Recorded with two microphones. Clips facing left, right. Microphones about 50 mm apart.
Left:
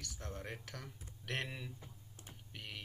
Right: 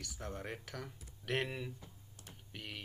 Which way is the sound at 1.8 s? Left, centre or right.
Left.